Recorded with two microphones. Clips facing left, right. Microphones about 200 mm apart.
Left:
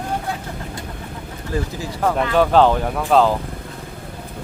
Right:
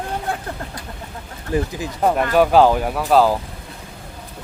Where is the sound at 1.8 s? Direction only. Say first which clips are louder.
Left 1 dB; 20° right (ahead or behind).